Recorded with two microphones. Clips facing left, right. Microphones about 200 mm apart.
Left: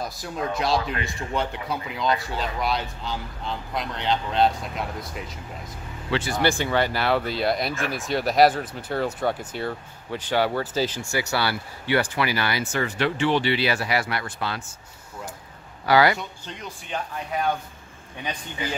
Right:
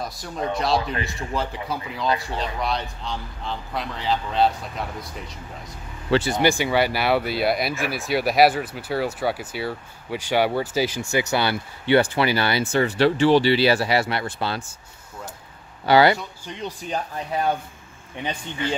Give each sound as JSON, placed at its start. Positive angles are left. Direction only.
{"t": 0.0, "sound": "speech", "side_deg": 0}
{"t": 6.3, "sound": "speech", "side_deg": -10}
{"t": 15.8, "sound": "speech", "side_deg": -25}